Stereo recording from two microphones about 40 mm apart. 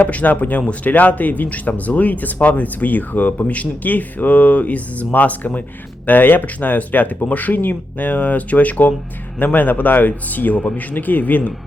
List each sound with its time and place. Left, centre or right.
0.0 s speech: left
6.1 s speech: left
9.4 s speech: left